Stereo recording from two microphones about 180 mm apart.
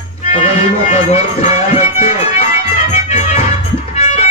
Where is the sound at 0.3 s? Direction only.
35° left (ahead or behind).